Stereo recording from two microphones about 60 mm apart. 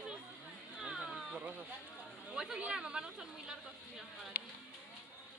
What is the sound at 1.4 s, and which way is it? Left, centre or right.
Speech, right.